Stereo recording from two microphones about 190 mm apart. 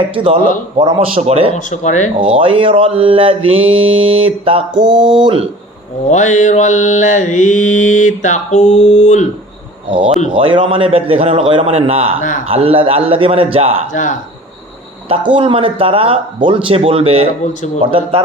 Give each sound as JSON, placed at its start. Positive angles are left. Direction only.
{"t": 0.1, "sound": "mantra", "side_deg": -25}
{"t": 1.5, "sound": "mantra", "side_deg": 40}
{"t": 2.1, "sound": "mantra", "side_deg": -30}
{"t": 6.1, "sound": "mantra", "side_deg": 40}
{"t": 10.3, "sound": "mantra", "side_deg": -25}
{"t": 13.9, "sound": "mantra", "side_deg": 40}
{"t": 15.1, "sound": "mantra", "side_deg": -25}